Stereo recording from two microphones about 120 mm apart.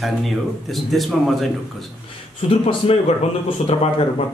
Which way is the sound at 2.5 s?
50° left (ahead or behind).